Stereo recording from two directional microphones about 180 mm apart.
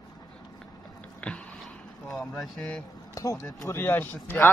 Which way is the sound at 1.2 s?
5° left (ahead or behind).